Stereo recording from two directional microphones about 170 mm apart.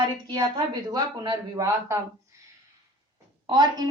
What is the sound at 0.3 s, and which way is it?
A child's voice, 25° right (ahead or behind).